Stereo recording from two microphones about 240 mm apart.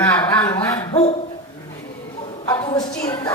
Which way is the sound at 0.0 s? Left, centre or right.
Centre.